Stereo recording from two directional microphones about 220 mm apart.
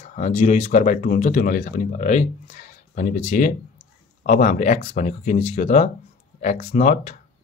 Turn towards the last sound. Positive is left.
turn(degrees=35)  # may be behind; listen again after turning